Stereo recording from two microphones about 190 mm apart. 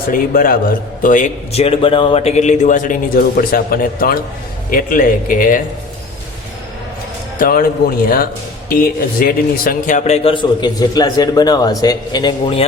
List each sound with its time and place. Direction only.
0.1 s a man's voice: 50° left (ahead or behind)
7.3 s a man's voice: 50° left (ahead or behind); by 12.6 s 25° left (ahead or behind)